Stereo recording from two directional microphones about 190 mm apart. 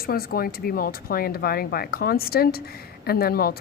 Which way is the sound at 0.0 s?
50° left (ahead or behind).